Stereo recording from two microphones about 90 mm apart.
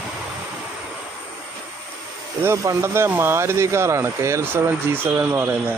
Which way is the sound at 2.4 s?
35° right (ahead or behind).